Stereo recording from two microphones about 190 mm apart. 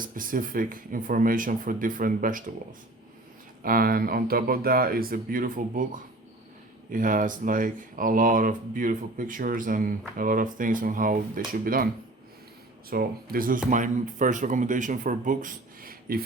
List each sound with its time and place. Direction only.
0.0 s speech: 45° right (ahead or behind)
3.6 s speech: 50° right (ahead or behind)
12.9 s speech: 50° right (ahead or behind)